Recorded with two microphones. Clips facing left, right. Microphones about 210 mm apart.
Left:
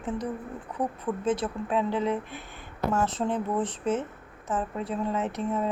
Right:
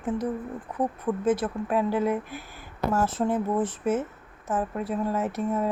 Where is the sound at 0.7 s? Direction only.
25° right (ahead or behind).